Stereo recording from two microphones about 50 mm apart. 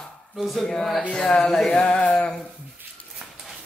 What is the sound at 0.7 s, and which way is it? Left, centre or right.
Speech, centre.